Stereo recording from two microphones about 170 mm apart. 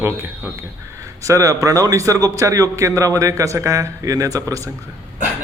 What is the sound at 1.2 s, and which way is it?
A man's voice, 20° right (ahead or behind).